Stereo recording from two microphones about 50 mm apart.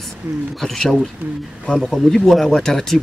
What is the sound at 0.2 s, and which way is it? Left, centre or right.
Speech, right.